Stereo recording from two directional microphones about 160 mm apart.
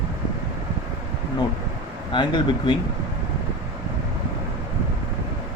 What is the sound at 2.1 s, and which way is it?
Speech, 30° left (ahead or behind).